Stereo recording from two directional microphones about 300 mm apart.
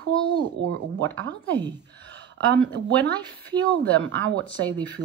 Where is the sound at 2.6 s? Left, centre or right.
Centre.